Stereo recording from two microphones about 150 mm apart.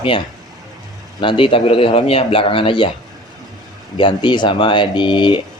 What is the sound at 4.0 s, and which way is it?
A man's voice, 30° left (ahead or behind).